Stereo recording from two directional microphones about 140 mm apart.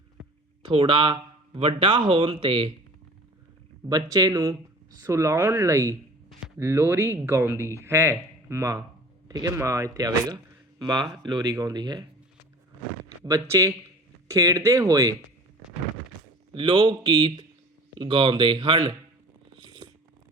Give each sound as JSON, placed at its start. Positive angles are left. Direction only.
{"t": 0.7, "sound": "speech", "side_deg": -35}
{"t": 3.8, "sound": "a man's voice", "side_deg": -30}
{"t": 13.2, "sound": "a man's voice", "side_deg": -25}
{"t": 16.6, "sound": "speech", "side_deg": -35}
{"t": 19.5, "sound": "a sound", "side_deg": -35}